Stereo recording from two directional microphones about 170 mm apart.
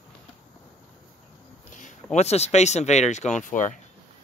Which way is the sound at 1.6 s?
45° left (ahead or behind).